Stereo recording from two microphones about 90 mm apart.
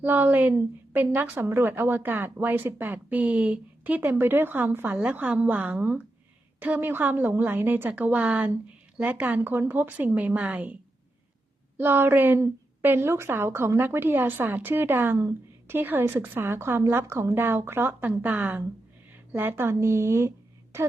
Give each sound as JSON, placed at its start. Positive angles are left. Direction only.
{"t": 0.0, "sound": "a woman's voice", "side_deg": -20}
{"t": 11.8, "sound": "a woman's voice", "side_deg": -25}